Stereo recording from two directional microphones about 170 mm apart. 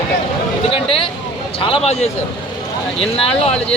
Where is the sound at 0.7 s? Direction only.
35° left (ahead or behind).